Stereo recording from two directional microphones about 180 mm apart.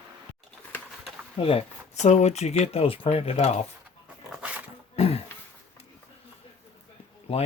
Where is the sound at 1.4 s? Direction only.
35° left (ahead or behind).